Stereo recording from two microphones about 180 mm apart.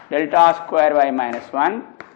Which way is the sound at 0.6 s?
15° left (ahead or behind).